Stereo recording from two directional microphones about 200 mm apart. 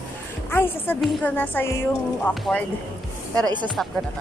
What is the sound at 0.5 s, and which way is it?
Speech, 10° left (ahead or behind).